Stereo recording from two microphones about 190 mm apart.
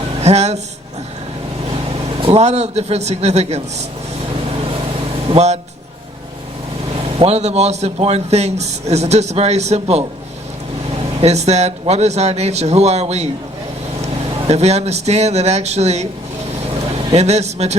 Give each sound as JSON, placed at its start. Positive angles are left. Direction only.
{"t": 0.2, "sound": "speech", "side_deg": -35}
{"t": 2.1, "sound": "a man's voice", "side_deg": -30}
{"t": 5.3, "sound": "a man's voice", "side_deg": -35}
{"t": 7.2, "sound": "a man's voice", "side_deg": -35}
{"t": 11.2, "sound": "a man's voice", "side_deg": -35}
{"t": 14.4, "sound": "a man's voice", "side_deg": -35}
{"t": 17.2, "sound": "a man's voice", "side_deg": -35}